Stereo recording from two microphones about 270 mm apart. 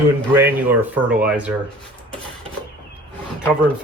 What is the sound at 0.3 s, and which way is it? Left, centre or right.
Speech, centre.